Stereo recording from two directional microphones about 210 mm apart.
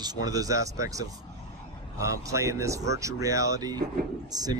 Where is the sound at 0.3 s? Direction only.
15° right (ahead or behind).